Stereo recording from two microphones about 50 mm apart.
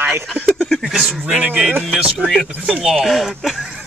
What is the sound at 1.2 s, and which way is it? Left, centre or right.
Speech, right.